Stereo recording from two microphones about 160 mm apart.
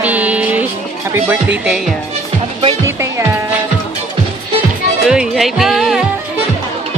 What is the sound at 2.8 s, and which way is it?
Speech, 15° right (ahead or behind).